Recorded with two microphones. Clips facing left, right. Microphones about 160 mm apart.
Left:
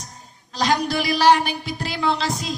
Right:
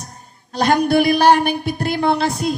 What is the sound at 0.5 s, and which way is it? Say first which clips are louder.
Speech: right 6 dB; 55° right (ahead or behind).